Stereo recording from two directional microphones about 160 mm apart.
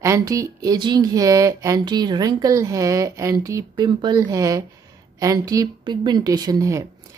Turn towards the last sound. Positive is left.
turn(degrees=-20)  # may be behind; listen again after turning